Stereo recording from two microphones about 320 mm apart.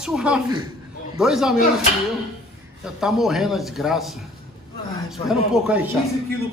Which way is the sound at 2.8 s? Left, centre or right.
Centre.